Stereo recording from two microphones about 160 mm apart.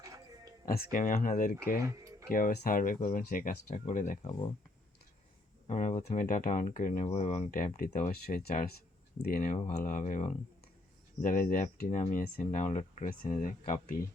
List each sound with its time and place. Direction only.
0.0 s a sound: 20° right (ahead or behind)
0.6 s speech: 70° left (ahead or behind)
1.8 s music: 20° right (ahead or behind)
2.3 s speech: 60° left (ahead or behind)
5.6 s speech: 50° left (ahead or behind)
7.1 s speech: 40° left (ahead or behind)
7.5 s speech: 55° left (ahead or behind)
11.2 s speech: 60° left (ahead or behind)